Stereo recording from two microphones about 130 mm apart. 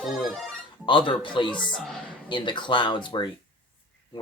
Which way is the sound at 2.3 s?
35° left (ahead or behind).